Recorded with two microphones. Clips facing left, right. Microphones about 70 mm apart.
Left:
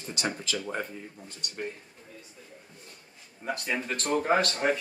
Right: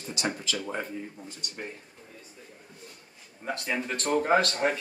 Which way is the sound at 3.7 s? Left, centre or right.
Centre.